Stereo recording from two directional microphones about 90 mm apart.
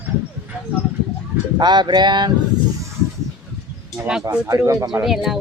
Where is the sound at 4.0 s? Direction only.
20° right (ahead or behind).